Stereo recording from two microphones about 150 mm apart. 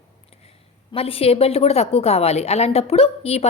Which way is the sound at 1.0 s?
40° left (ahead or behind).